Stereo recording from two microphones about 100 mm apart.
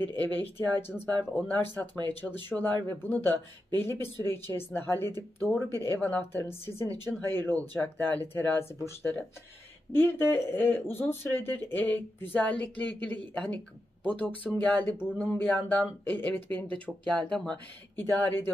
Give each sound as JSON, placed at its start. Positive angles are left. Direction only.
{"t": 0.0, "sound": "speech", "side_deg": 20}